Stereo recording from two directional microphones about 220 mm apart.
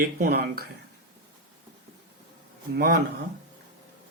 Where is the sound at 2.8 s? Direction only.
45° right (ahead or behind).